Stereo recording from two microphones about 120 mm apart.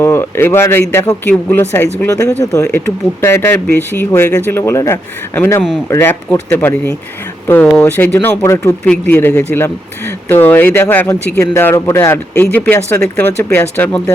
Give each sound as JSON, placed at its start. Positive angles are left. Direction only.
{"t": 0.0, "sound": "speech", "side_deg": 20}